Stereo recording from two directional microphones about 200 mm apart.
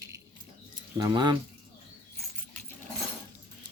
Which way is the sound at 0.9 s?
20° right (ahead or behind).